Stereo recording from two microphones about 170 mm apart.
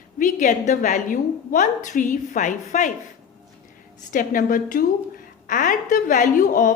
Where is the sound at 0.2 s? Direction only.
50° left (ahead or behind).